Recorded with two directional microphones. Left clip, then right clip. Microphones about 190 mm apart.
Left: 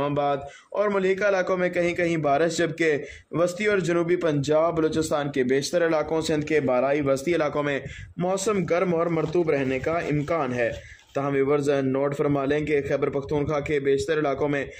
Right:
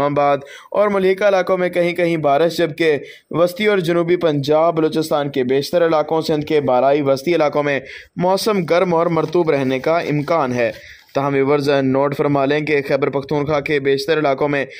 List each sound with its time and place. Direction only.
0.1 s a man's voice: 45° right (ahead or behind)